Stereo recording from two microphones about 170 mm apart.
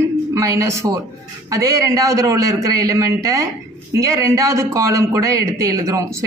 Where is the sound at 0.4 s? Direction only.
15° right (ahead or behind).